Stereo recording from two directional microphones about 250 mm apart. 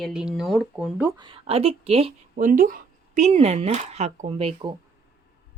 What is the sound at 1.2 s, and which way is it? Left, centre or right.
Speech, centre.